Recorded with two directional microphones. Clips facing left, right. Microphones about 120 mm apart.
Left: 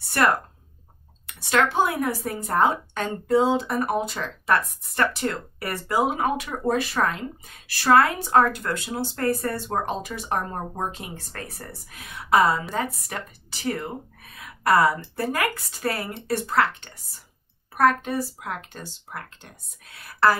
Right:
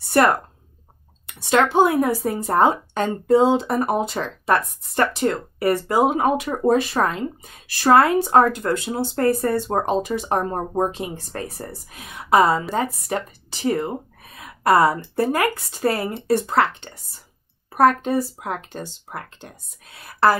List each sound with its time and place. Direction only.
0.2 s speech: 25° right (ahead or behind)